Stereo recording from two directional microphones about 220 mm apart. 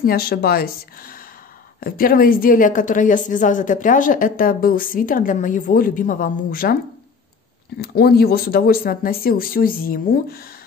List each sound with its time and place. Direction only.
0.0 s a woman's voice: 45° left (ahead or behind)
7.8 s speech: 45° left (ahead or behind)